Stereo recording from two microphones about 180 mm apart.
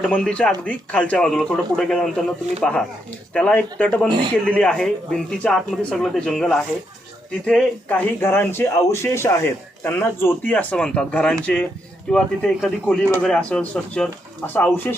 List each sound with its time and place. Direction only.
0.1 s speech: 5° left (ahead or behind)
4.1 s a man's voice: 25° right (ahead or behind)
4.4 s speech: 5° left (ahead or behind)